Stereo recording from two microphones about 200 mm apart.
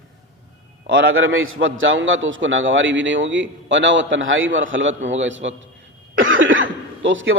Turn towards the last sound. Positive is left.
turn(degrees=-70)  # may be behind; listen again after turning